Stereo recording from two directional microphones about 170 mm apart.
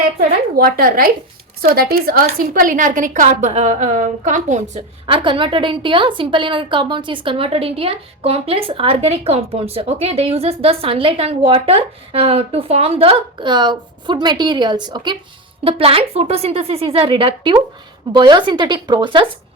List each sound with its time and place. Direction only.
0.2 s a woman's voice: 60° right (ahead or behind); by 19.3 s 30° right (ahead or behind)